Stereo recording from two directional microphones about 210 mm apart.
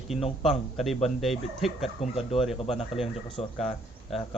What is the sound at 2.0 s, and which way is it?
Speech, 30° left (ahead or behind).